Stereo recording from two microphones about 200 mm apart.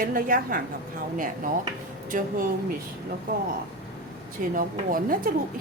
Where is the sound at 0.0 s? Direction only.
45° right (ahead or behind).